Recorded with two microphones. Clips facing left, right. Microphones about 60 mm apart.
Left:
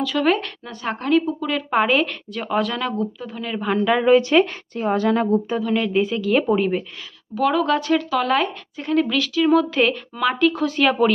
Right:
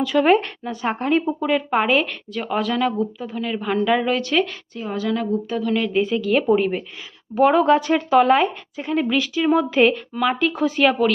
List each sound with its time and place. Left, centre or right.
0.0 s speech: right
1.7 s a woman's voice: centre
4.2 s speech: left
4.7 s a woman's voice: left
5.5 s a woman's voice: centre
7.3 s speech: right; by 10.9 s centre